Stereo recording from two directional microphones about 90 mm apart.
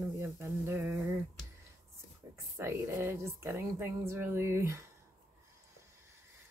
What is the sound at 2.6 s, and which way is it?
Speech, 30° right (ahead or behind).